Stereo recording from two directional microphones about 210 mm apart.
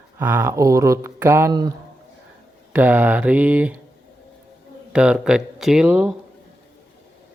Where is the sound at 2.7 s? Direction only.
5° right (ahead or behind).